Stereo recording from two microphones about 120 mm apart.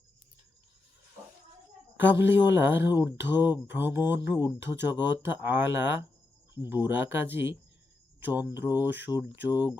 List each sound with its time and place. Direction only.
2.0 s speech: 15° right (ahead or behind)